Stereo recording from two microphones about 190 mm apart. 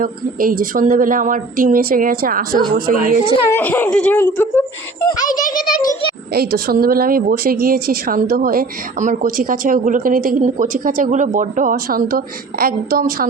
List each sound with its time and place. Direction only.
0.0 s a woman's voice: 45° right (ahead or behind)
3.5 s speech: 10° left (ahead or behind)
5.4 s a child's voice: 50° left (ahead or behind)
6.3 s a woman's voice: 55° right (ahead or behind)